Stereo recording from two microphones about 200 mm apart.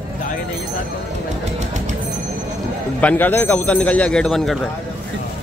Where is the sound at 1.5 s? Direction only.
35° right (ahead or behind).